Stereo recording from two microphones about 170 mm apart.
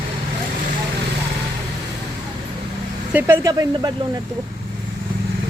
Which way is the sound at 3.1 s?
15° right (ahead or behind).